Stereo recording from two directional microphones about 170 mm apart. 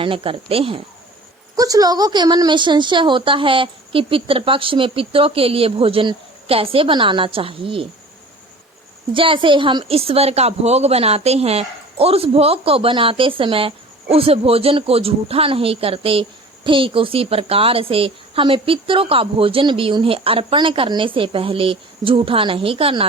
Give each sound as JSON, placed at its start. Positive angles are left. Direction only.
{"t": 0.0, "sound": "a woman's voice", "side_deg": -30}
{"t": 1.5, "sound": "a woman's voice", "side_deg": -20}
{"t": 9.1, "sound": "a woman's voice", "side_deg": -30}